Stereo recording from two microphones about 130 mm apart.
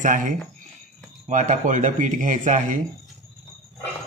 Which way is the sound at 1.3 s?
75° right (ahead or behind).